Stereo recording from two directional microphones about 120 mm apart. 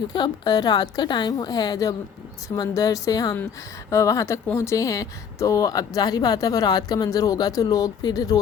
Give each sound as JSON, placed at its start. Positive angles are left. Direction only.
{"t": 0.1, "sound": "a woman's voice", "side_deg": 35}